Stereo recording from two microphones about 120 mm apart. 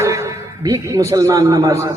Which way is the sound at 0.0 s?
25° right (ahead or behind).